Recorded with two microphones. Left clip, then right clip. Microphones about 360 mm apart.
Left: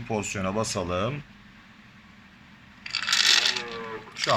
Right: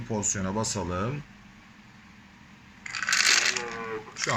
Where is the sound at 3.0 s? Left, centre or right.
Centre.